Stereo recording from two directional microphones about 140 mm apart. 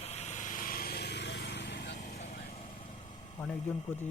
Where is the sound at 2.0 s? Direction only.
55° left (ahead or behind).